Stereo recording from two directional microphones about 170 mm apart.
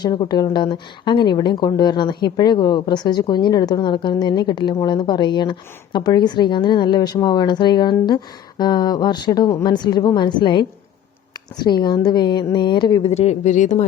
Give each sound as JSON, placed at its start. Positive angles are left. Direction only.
{"t": 0.0, "sound": "speech", "side_deg": 25}
{"t": 13.1, "sound": "speech", "side_deg": 40}